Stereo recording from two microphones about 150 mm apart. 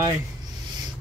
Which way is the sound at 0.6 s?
30° right (ahead or behind).